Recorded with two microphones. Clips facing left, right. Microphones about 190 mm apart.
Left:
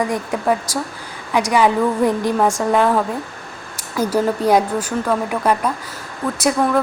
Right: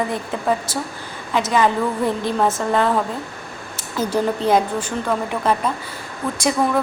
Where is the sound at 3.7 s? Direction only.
10° left (ahead or behind).